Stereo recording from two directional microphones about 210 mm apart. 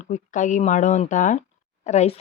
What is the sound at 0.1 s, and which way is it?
Speech, 35° left (ahead or behind).